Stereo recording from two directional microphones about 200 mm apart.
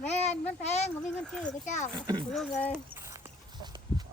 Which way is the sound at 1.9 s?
20° right (ahead or behind).